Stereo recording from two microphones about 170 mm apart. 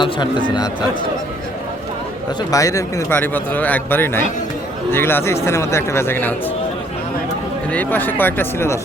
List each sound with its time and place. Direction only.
0.0 s speech: 25° left (ahead or behind)
2.5 s speech: 20° left (ahead or behind)
7.7 s speech: 10° left (ahead or behind)